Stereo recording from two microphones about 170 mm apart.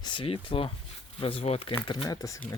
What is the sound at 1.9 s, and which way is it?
Speech, 25° left (ahead or behind).